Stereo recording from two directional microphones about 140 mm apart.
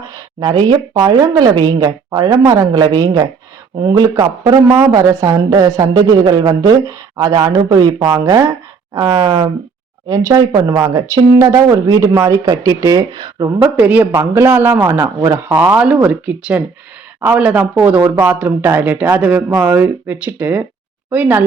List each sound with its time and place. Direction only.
0.0 s a woman's voice: 25° right (ahead or behind)
13.6 s a man's voice: 10° right (ahead or behind)